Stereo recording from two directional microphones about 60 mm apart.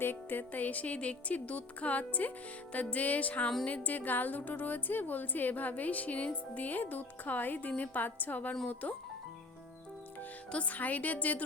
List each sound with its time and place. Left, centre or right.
0.0 s a woman's voice: left
10.5 s a woman's voice: left